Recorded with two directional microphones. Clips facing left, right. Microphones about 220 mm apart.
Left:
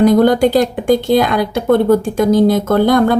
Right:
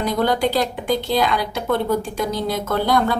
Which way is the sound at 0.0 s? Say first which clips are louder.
Left 10 dB; 45° left (ahead or behind).